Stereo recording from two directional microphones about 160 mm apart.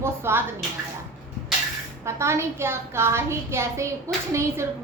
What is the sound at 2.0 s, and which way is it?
A woman's voice, 15° right (ahead or behind).